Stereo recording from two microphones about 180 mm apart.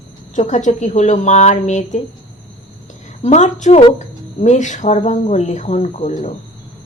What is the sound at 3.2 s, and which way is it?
Speech, 40° left (ahead or behind).